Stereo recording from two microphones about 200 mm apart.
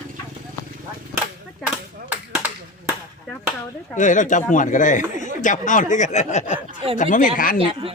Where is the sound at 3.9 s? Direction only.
40° left (ahead or behind).